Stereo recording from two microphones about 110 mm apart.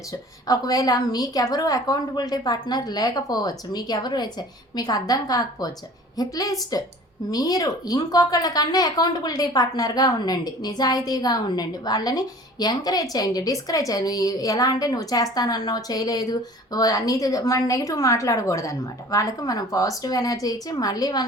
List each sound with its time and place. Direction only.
0.1 s a woman's voice: 35° left (ahead or behind)